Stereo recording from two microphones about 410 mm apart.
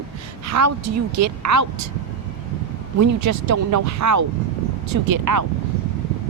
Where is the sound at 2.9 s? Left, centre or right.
Right.